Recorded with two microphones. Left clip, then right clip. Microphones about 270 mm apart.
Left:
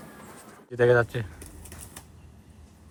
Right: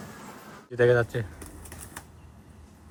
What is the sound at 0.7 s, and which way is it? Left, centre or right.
Bird, centre.